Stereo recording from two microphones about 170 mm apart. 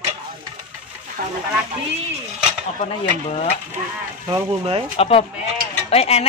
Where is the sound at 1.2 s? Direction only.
50° right (ahead or behind).